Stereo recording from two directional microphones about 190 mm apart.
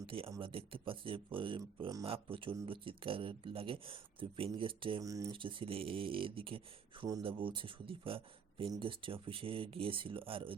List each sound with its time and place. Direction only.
0.0 s speech: 30° right (ahead or behind)